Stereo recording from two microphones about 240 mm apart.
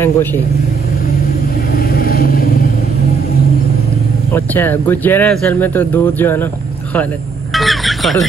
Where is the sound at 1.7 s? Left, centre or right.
Left.